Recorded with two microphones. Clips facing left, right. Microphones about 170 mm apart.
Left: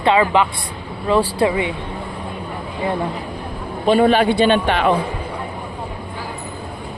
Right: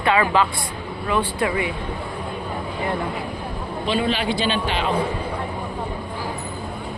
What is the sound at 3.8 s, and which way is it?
A man's voice, 50° left (ahead or behind).